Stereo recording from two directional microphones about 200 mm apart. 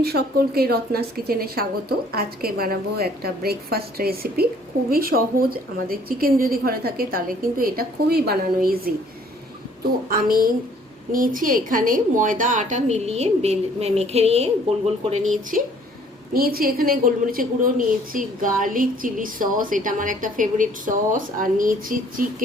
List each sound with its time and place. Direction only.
0.0 s a woman's voice: 50° right (ahead or behind)
10.1 s a woman's voice: 45° right (ahead or behind)
16.3 s a woman's voice: 50° right (ahead or behind)